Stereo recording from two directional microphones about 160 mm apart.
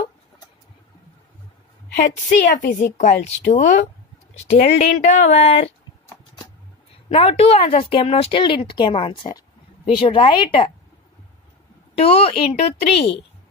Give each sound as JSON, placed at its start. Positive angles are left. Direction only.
{"t": 2.2, "sound": "speech", "side_deg": 55}
{"t": 4.6, "sound": "speech", "side_deg": 70}
{"t": 5.0, "sound": "speech", "side_deg": 50}
{"t": 7.1, "sound": "a woman's voice", "side_deg": 35}
{"t": 12.0, "sound": "a woman's voice", "side_deg": 40}